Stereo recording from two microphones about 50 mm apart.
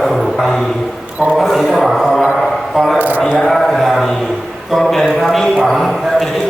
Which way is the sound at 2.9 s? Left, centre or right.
Right.